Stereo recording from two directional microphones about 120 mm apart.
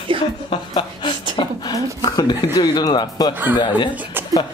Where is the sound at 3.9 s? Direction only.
15° right (ahead or behind).